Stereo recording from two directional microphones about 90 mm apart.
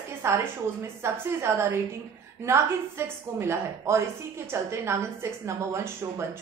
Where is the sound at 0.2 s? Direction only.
30° right (ahead or behind).